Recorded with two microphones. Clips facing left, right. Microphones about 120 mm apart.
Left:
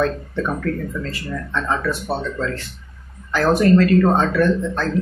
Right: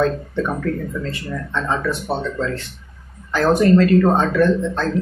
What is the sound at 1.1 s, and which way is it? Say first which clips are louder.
Speech: even; 20° right (ahead or behind).